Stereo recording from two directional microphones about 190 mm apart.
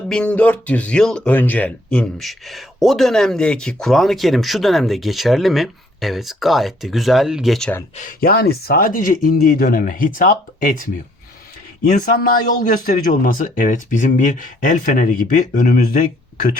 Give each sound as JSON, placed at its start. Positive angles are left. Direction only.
{"t": 0.1, "sound": "speech", "side_deg": 5}
{"t": 7.9, "sound": "a man's voice", "side_deg": 45}